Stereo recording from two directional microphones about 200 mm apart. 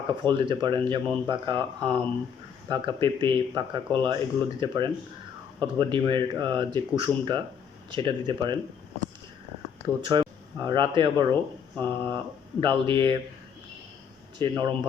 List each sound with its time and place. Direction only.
0.1 s speech: 25° right (ahead or behind)
10.1 s speech: 20° right (ahead or behind)
14.3 s speech: 25° right (ahead or behind)